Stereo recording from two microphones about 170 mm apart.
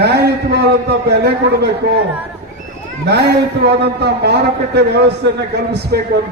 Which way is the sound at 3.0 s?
75° right (ahead or behind).